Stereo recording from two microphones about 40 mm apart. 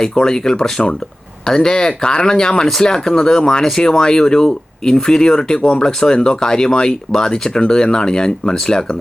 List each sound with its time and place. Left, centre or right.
0.0 s speech: centre